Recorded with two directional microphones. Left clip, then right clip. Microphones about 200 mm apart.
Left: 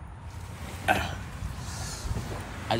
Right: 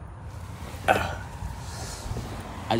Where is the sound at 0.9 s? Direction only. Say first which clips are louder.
Right 3 dB; 35° right (ahead or behind).